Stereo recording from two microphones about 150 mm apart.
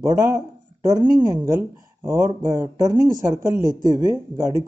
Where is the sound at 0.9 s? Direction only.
25° right (ahead or behind).